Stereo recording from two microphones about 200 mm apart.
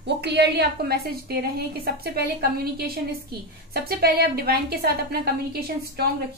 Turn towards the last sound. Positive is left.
turn(degrees=-50)  # may be behind; listen again after turning